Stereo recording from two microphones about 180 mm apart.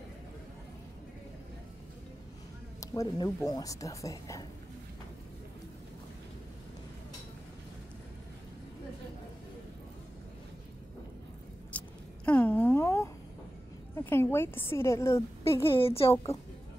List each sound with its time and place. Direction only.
2.8 s speech: 15° left (ahead or behind)
11.7 s chewing: 10° left (ahead or behind)
12.3 s a sound: 10° left (ahead or behind)
13.9 s a woman's voice: 15° left (ahead or behind)
15.7 s a woman's voice: 30° left (ahead or behind)